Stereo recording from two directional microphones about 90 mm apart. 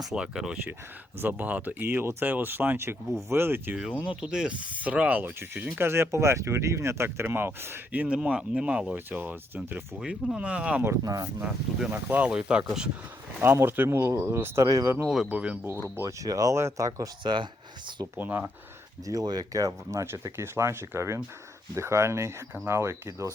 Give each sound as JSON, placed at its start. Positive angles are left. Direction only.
{"t": 0.0, "sound": "speech", "side_deg": -5}
{"t": 1.2, "sound": "speech", "side_deg": -20}
{"t": 4.2, "sound": "speech", "side_deg": -10}
{"t": 8.0, "sound": "speech", "side_deg": -10}
{"t": 10.0, "sound": "speech", "side_deg": -10}
{"t": 11.0, "sound": "speech", "side_deg": -45}
{"t": 11.3, "sound": "speech", "side_deg": -10}
{"t": 13.4, "sound": "speech", "side_deg": -25}
{"t": 15.0, "sound": "speech", "side_deg": -5}
{"t": 15.3, "sound": "speech", "side_deg": -15}
{"t": 16.0, "sound": "speech", "side_deg": -40}
{"t": 17.2, "sound": "speech", "side_deg": -60}
{"t": 18.2, "sound": "speech", "side_deg": -20}
{"t": 19.0, "sound": "speech", "side_deg": -45}